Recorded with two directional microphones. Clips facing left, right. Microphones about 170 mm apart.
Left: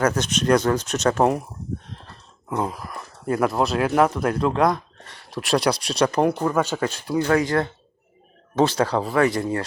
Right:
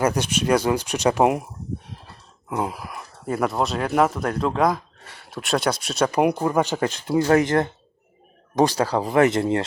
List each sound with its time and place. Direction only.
0.0 s speech: 10° right (ahead or behind)